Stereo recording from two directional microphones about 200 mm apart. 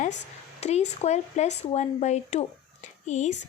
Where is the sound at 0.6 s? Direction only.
35° left (ahead or behind).